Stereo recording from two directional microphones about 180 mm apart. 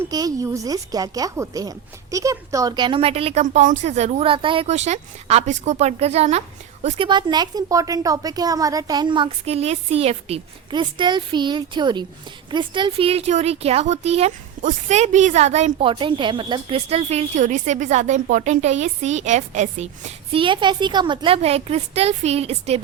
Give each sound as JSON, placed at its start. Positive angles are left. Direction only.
{"t": 0.1, "sound": "a woman's voice", "side_deg": -20}
{"t": 3.4, "sound": "a woman's voice", "side_deg": -45}